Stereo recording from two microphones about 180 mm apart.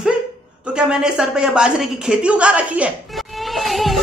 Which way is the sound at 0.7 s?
5° right (ahead or behind).